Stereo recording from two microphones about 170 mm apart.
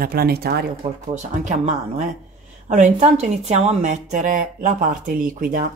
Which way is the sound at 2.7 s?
45° right (ahead or behind).